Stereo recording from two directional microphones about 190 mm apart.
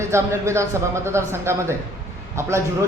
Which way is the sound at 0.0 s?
15° right (ahead or behind).